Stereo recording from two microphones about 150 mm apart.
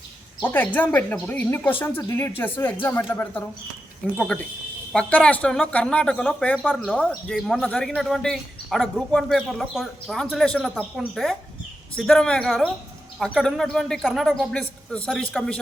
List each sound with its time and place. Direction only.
0.4 s speech: 10° left (ahead or behind)